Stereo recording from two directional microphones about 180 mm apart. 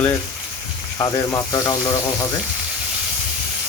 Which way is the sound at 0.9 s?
20° left (ahead or behind).